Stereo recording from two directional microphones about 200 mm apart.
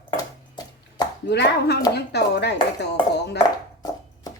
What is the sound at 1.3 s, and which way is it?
A child's voice, 55° left (ahead or behind).